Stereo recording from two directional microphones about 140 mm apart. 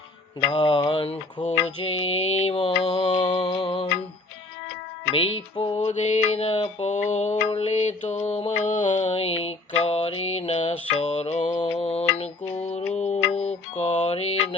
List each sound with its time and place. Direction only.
0.5 s mantra: 35° left (ahead or behind)
5.1 s mantra: 35° left (ahead or behind)
5.8 s mantra: 55° left (ahead or behind)
6.8 s mantra: 60° left (ahead or behind)
8.6 s mantra: 65° left (ahead or behind)
9.0 s mantra: 45° left (ahead or behind)
10.9 s music: 45° left (ahead or behind)
11.5 s mantra: 40° left (ahead or behind)